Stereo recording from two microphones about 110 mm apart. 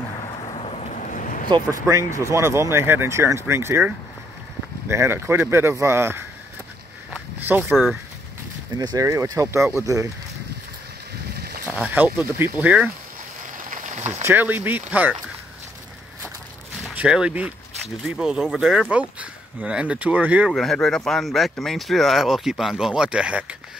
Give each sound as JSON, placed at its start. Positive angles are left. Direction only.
{"t": 0.3, "sound": "thunder", "side_deg": 55}
{"t": 1.7, "sound": "speech", "side_deg": -30}
{"t": 7.1, "sound": "a sound", "side_deg": -10}
{"t": 7.7, "sound": "speech", "side_deg": -5}
{"t": 8.7, "sound": "speech", "side_deg": -35}
{"t": 11.6, "sound": "speech", "side_deg": -15}
{"t": 13.8, "sound": "a sound", "side_deg": -90}
{"t": 14.2, "sound": "speech", "side_deg": -20}
{"t": 16.9, "sound": "speech", "side_deg": -10}
{"t": 20.5, "sound": "speech", "side_deg": 5}